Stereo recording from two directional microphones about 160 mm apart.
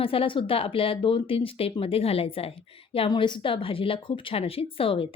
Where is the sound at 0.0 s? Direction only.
35° left (ahead or behind).